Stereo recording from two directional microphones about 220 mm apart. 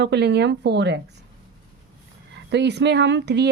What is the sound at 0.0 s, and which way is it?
A woman's voice, 50° right (ahead or behind).